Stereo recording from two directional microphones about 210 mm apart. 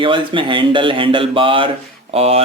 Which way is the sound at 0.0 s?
25° right (ahead or behind).